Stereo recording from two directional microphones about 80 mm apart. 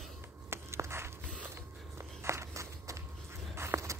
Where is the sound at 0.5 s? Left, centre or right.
Right.